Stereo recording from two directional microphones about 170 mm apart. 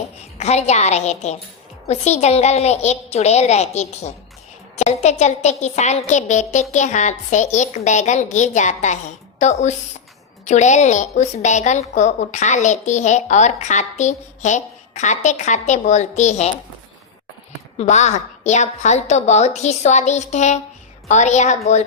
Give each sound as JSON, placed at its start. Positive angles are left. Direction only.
{"t": 0.3, "sound": "a woman's voice", "side_deg": 40}
{"t": 17.7, "sound": "a woman's voice", "side_deg": 45}